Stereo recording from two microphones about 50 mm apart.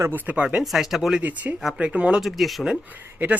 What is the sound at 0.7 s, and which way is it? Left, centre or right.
Speech, centre.